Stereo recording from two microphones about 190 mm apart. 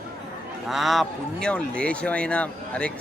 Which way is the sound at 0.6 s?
Centre (ahead or behind).